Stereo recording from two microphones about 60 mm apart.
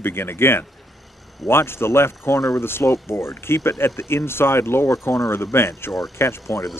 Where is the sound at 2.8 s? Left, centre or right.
Left.